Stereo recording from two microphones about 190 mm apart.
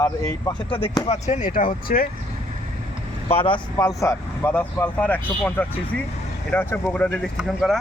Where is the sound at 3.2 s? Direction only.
30° left (ahead or behind).